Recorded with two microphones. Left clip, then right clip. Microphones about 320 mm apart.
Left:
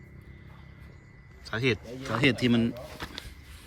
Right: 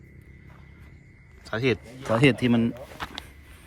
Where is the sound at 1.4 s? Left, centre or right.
Centre.